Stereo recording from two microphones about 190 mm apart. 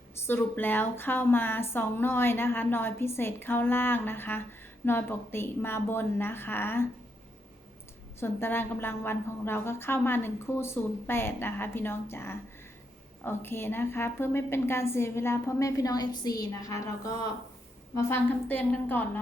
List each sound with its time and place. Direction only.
0.3 s a woman's voice: 10° left (ahead or behind)
8.2 s a woman's voice: 10° left (ahead or behind)